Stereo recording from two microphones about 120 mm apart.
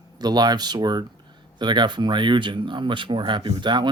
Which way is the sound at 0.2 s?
35° right (ahead or behind).